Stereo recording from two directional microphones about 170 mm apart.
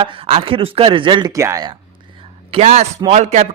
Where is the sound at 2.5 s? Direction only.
40° right (ahead or behind).